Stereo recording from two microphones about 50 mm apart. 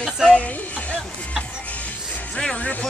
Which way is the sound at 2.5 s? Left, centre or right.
Left.